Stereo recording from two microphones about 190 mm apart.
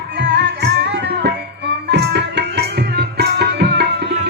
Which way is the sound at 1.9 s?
60° right (ahead or behind).